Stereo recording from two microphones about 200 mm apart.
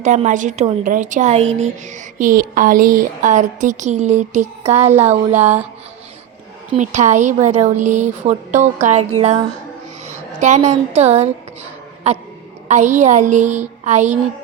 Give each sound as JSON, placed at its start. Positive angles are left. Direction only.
{"t": 0.0, "sound": "a woman's voice", "side_deg": -35}
{"t": 6.7, "sound": "a woman's voice", "side_deg": -35}